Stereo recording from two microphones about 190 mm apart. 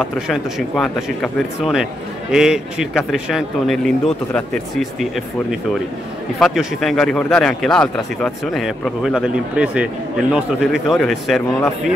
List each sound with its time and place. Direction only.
0.3 s speech: centre (ahead or behind)
6.4 s speech: centre (ahead or behind)